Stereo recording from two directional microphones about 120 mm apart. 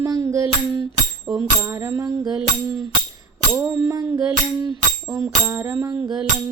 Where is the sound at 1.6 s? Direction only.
20° right (ahead or behind).